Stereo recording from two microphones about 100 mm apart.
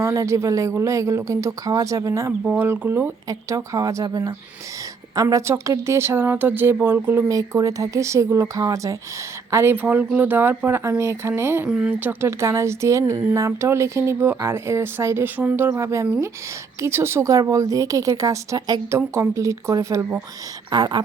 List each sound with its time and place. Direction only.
0.0 s a woman's voice: 30° right (ahead or behind)
2.4 s speech: 20° right (ahead or behind)
3.2 s a woman's voice: 35° right (ahead or behind)
7.3 s a woman's voice: 35° right (ahead or behind)
11.7 s speech: 10° right (ahead or behind)
12.4 s a woman's voice: 30° right (ahead or behind)
18.9 s a woman's voice: 25° right (ahead or behind)
20.7 s speech: 45° right (ahead or behind)